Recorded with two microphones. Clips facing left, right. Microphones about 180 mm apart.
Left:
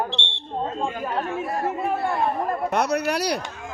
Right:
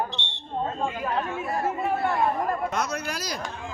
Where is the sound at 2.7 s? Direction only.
65° left (ahead or behind).